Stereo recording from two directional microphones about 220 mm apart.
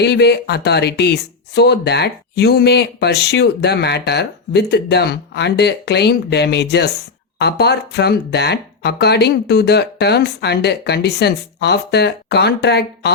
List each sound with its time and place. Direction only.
0.0 s speech: 50° left (ahead or behind)